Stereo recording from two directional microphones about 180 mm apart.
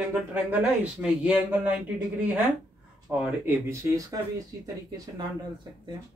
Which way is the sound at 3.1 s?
10° right (ahead or behind).